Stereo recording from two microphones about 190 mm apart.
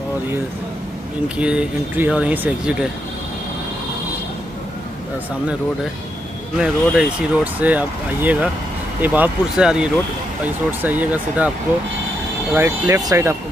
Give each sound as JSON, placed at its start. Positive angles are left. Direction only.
{"t": 1.4, "sound": "speech", "side_deg": -5}
{"t": 6.6, "sound": "speech", "side_deg": -5}
{"t": 12.5, "sound": "speech", "side_deg": -10}